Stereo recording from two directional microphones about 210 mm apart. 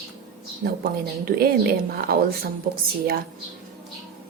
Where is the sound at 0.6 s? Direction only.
45° right (ahead or behind).